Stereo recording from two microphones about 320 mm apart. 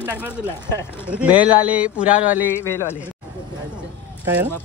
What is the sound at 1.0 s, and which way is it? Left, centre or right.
Speech, centre.